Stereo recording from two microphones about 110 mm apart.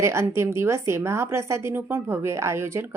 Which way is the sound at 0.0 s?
25° right (ahead or behind).